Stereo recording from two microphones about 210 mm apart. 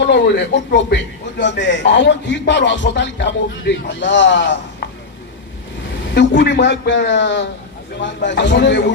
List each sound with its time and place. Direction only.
0.0 s speech: 55° left (ahead or behind)
6.1 s speech: 55° left (ahead or behind)